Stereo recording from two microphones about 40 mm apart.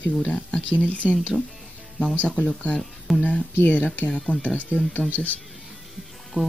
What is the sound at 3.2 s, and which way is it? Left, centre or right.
Speech, left.